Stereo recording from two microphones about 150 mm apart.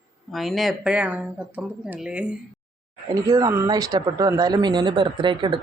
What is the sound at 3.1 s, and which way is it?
Speech, 25° right (ahead or behind).